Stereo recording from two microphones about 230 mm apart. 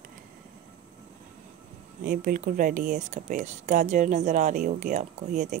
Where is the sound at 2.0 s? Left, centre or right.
Right.